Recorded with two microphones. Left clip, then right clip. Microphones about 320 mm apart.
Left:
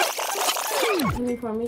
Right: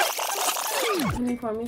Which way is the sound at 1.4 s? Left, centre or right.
Centre.